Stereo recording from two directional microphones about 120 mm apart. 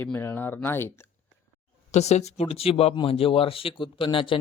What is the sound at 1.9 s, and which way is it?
Speech, 70° left (ahead or behind).